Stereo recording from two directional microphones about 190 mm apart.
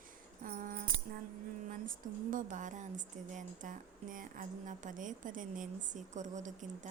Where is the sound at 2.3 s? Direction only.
40° right (ahead or behind).